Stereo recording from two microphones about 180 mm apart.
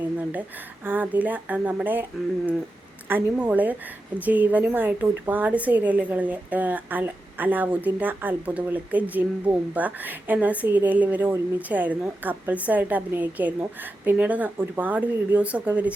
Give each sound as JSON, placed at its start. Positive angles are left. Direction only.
{"t": 0.9, "sound": "a woman's voice", "side_deg": -10}
{"t": 3.1, "sound": "a woman's voice", "side_deg": -10}